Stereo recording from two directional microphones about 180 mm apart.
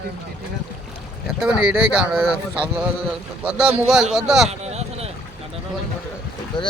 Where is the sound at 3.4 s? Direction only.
5° right (ahead or behind).